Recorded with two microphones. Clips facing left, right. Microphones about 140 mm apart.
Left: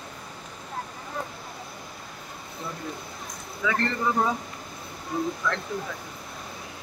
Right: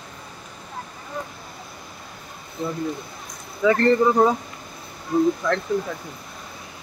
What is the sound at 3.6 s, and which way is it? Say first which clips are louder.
Speech: right 10 dB; 35° right (ahead or behind).